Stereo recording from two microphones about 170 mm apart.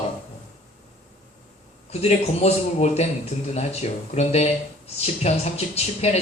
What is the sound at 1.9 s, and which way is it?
Speech, 40° left (ahead or behind).